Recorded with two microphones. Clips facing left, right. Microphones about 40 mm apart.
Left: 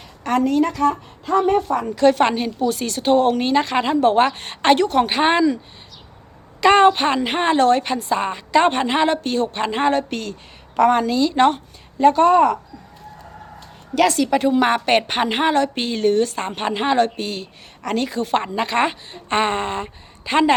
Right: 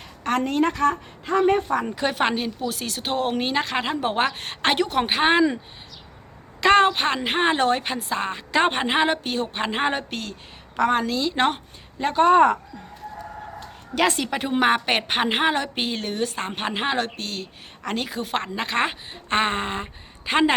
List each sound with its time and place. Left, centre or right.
0.3 s speech: right
0.5 s speech: right
1.8 s speech: centre
6.6 s a woman's voice: centre
10.0 s a woman's voice: centre
12.3 s speech: right
13.9 s a woman's voice: right
17.2 s speech: centre